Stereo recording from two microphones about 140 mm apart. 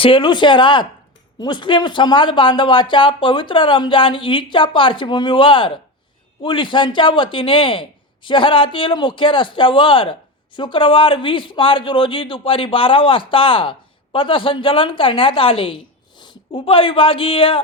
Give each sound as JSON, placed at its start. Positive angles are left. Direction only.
{"t": 0.0, "sound": "a man's voice", "side_deg": 35}